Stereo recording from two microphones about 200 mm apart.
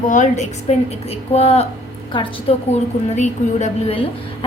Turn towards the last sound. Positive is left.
turn(degrees=35)  # may be behind; listen again after turning